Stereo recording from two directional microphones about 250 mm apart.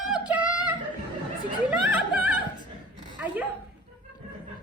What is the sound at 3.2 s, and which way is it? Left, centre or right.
Speech, centre.